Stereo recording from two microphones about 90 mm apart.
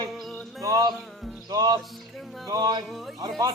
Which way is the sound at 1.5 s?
50° right (ahead or behind).